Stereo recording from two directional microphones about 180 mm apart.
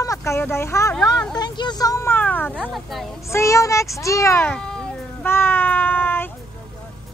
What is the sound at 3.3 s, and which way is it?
Speech, 15° left (ahead or behind).